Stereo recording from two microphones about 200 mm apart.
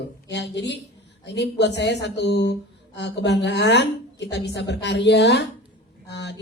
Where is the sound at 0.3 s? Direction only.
60° left (ahead or behind).